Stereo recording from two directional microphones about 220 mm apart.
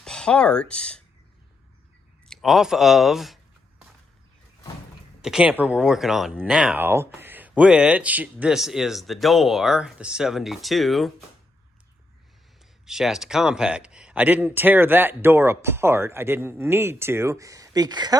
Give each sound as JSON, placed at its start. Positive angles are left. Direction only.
{"t": 0.0, "sound": "speech", "side_deg": 5}
{"t": 2.2, "sound": "speech", "side_deg": 0}
{"t": 5.2, "sound": "speech", "side_deg": -5}
{"t": 12.8, "sound": "speech", "side_deg": 0}